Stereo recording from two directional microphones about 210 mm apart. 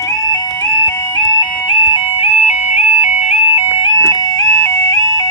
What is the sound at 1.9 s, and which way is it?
Music, 25° left (ahead or behind).